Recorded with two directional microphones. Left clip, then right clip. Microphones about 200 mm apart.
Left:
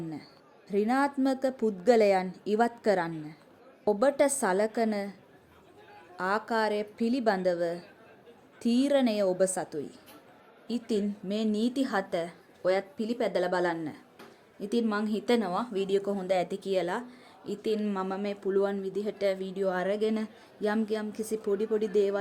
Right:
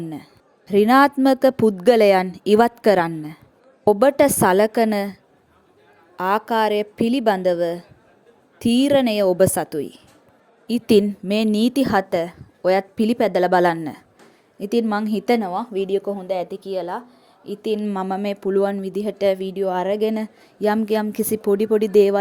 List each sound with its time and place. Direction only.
0.7 s a woman's voice: 45° right (ahead or behind); by 17.2 s 5° right (ahead or behind)
17.6 s a woman's voice: 25° right (ahead or behind)